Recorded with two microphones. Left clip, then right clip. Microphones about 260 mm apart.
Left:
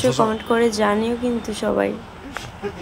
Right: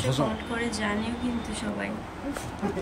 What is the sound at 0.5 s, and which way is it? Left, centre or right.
A woman's voice, centre.